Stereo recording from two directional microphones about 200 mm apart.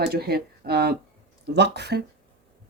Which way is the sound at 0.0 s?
50° right (ahead or behind).